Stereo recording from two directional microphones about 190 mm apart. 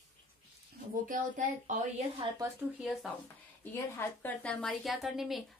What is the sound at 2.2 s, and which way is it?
Speech, 25° right (ahead or behind).